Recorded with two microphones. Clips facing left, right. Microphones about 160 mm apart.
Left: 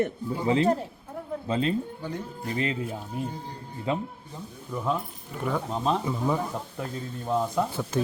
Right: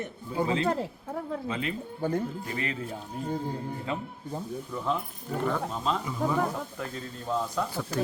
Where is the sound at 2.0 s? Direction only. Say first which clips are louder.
Right 6 dB; 50° right (ahead or behind).